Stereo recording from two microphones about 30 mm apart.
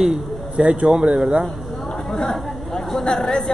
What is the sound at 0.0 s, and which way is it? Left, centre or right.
Speech, right.